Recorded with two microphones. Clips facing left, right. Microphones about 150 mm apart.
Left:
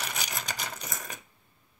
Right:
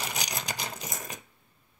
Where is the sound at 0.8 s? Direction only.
20° right (ahead or behind).